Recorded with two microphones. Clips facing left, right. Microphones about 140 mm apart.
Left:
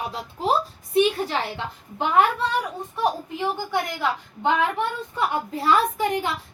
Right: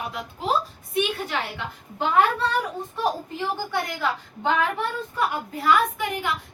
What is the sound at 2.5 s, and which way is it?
A woman's voice, 15° left (ahead or behind).